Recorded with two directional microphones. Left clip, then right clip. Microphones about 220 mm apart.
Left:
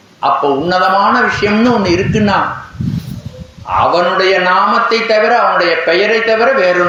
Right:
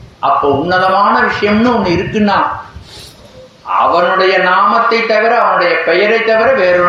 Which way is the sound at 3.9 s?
30° left (ahead or behind).